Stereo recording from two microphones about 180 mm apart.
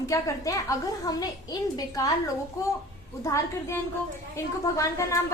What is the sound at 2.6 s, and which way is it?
A woman's voice, 15° left (ahead or behind).